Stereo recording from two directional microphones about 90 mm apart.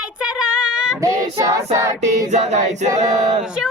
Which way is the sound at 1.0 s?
35° right (ahead or behind).